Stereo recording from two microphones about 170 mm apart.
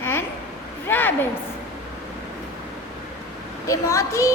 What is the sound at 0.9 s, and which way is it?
Speech, 10° left (ahead or behind).